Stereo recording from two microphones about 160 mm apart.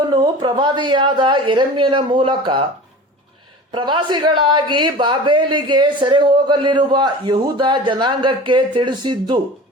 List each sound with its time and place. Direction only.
0.1 s a woman's voice: 25° right (ahead or behind)
3.7 s a woman's voice: 30° right (ahead or behind)